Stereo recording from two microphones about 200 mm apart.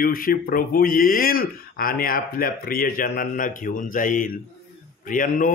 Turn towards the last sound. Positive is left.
turn(degrees=40)  # may be behind; listen again after turning